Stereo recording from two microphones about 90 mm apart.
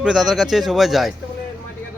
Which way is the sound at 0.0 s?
5° right (ahead or behind).